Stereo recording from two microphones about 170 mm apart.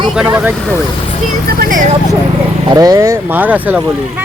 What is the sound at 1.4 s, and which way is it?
Speech, 55° right (ahead or behind).